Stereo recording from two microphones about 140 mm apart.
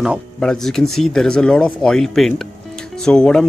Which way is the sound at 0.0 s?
Centre (ahead or behind).